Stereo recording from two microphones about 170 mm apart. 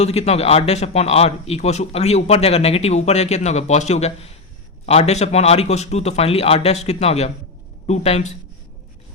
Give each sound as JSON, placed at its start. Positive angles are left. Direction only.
{"t": 0.0, "sound": "speech", "side_deg": 40}